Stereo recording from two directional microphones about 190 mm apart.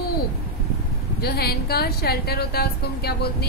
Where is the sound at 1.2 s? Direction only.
55° left (ahead or behind).